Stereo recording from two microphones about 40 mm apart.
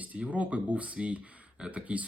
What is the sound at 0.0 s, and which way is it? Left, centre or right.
Speech, right.